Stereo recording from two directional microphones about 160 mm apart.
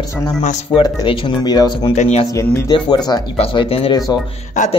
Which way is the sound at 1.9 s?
45° left (ahead or behind).